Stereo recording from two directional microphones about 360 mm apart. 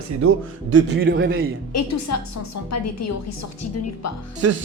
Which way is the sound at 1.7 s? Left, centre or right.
Left.